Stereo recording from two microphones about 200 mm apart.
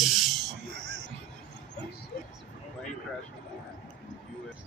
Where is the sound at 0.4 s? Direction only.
60° right (ahead or behind).